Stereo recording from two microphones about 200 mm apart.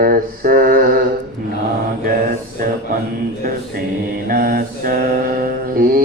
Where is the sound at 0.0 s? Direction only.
45° right (ahead or behind).